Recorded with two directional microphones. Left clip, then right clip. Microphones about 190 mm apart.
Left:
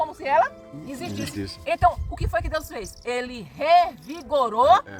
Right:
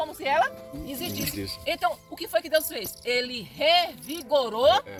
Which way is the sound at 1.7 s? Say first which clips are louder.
Left 7 dB; 15° right (ahead or behind).